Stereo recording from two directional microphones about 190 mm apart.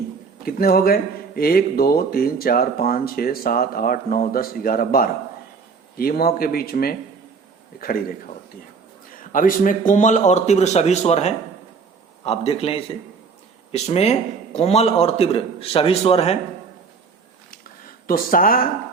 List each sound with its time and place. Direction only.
0.4 s speech: 50° left (ahead or behind)
9.3 s a man's voice: 45° left (ahead or behind)
18.0 s speech: 50° left (ahead or behind)